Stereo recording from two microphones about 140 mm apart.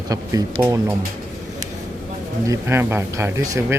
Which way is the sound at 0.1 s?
25° right (ahead or behind).